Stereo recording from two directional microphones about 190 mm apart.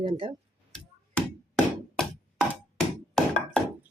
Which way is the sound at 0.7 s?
5° left (ahead or behind).